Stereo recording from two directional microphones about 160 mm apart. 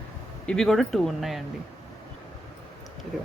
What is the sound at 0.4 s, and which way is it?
Speech, 5° left (ahead or behind).